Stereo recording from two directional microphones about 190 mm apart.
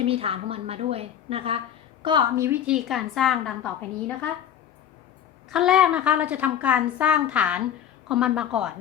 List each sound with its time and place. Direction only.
0.0 s a woman's voice: 30° right (ahead or behind)
2.0 s a woman's voice: 20° right (ahead or behind)
2.6 s a woman's voice: 5° right (ahead or behind)
5.5 s a woman's voice: 5° right (ahead or behind)